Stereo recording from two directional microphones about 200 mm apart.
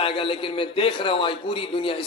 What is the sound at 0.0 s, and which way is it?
A man's voice, 25° left (ahead or behind).